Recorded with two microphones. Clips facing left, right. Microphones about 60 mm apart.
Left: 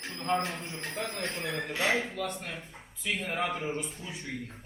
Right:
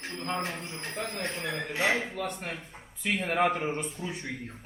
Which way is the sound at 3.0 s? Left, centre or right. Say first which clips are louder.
Right 5 dB; right.